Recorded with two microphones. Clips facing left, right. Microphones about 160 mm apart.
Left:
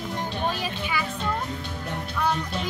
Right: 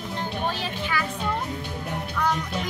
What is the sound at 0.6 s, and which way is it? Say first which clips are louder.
Music: right 1 dB; 10° left (ahead or behind).